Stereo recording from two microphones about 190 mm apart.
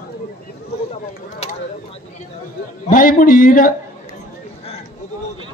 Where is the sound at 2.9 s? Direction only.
45° left (ahead or behind).